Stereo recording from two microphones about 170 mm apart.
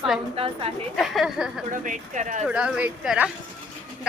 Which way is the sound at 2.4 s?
5° right (ahead or behind).